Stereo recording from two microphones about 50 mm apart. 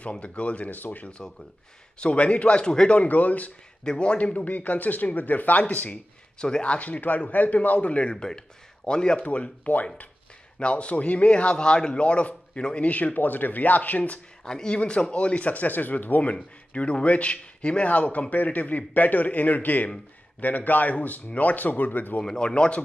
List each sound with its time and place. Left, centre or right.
0.1 s speech: left
2.0 s speech: left
2.9 s speech: left
3.8 s speech: centre
14.4 s speech: centre; by 22.2 s left
22.2 s speech: centre